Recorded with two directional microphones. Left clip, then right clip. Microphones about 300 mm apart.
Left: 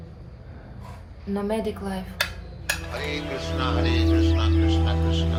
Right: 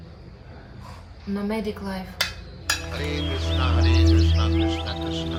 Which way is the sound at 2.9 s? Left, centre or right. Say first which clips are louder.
Even; centre.